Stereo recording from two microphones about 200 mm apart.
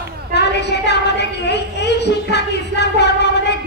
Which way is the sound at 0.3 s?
55° left (ahead or behind).